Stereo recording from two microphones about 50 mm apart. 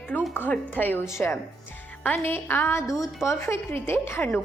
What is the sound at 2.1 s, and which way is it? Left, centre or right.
Speech, left.